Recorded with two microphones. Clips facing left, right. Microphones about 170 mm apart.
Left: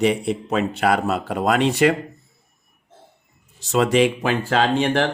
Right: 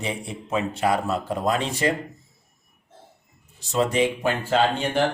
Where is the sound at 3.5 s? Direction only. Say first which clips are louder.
Left 4 dB; 85° left.